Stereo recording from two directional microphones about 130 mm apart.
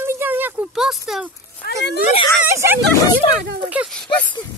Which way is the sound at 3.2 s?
35° left (ahead or behind).